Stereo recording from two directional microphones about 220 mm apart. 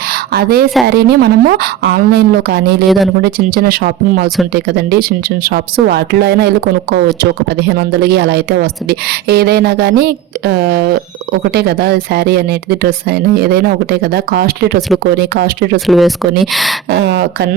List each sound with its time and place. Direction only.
0.3 s speech: 45° right (ahead or behind)
15.9 s speech: centre (ahead or behind)
16.9 s speech: 50° right (ahead or behind)